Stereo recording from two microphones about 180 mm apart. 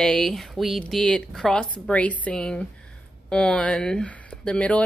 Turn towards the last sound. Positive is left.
turn(degrees=5)  # may be behind; listen again after turning